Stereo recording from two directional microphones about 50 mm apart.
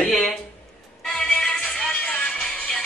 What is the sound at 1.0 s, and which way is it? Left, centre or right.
Music, centre.